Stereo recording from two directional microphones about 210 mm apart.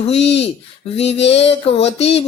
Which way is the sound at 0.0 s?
30° left (ahead or behind).